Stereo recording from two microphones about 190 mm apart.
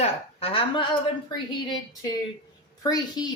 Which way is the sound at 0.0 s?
30° left (ahead or behind).